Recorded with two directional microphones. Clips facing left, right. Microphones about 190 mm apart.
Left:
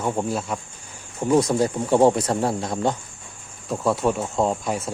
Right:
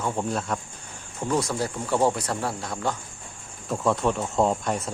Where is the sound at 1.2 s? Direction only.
20° left (ahead or behind).